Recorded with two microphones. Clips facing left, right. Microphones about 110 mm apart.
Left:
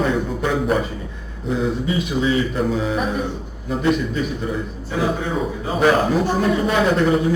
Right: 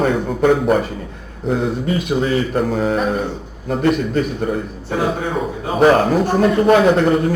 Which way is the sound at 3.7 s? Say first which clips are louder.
Right 3 dB; 50° right (ahead or behind).